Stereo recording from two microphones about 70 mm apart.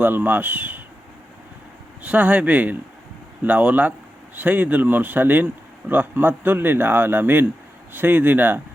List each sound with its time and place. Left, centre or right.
0.0 s speech: right
2.0 s speech: right